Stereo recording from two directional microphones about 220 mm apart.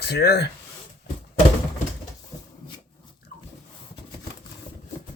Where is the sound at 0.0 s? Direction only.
45° left (ahead or behind).